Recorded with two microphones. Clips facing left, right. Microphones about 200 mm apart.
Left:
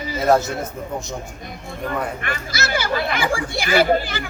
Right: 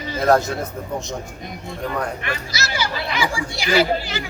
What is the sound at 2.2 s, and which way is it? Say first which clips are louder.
Speech: left 1 dB; 55° left (ahead or behind).